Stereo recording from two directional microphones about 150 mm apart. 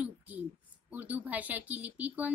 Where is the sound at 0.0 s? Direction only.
10° right (ahead or behind).